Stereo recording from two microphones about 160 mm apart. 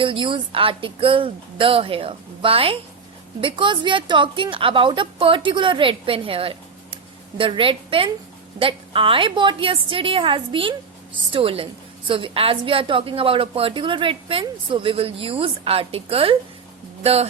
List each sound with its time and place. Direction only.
0.0 s a woman's voice: 30° right (ahead or behind)